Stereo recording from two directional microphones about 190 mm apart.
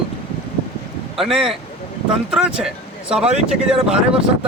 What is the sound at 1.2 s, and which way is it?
Speech, centre (ahead or behind).